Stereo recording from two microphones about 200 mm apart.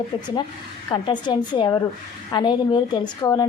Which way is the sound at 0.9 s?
25° left (ahead or behind).